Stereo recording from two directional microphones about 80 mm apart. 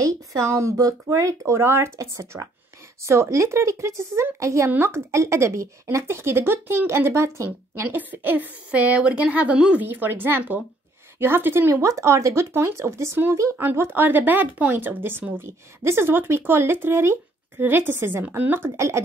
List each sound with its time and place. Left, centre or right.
0.0 s speech: right
4.6 s speech: right
13.6 s speech: right
18.8 s speech: right